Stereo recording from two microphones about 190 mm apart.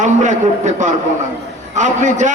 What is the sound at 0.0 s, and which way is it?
A man's voice, 40° right (ahead or behind).